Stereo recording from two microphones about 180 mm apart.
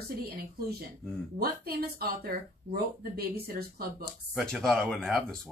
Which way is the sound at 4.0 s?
Centre (ahead or behind).